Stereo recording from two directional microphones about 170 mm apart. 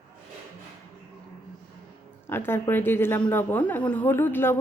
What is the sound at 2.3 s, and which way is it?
A woman's voice, 15° left (ahead or behind).